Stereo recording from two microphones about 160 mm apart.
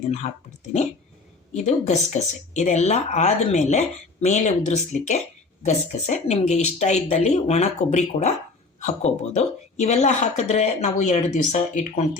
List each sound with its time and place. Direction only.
0.2 s speech: 50° left (ahead or behind)
1.5 s speech: 45° left (ahead or behind)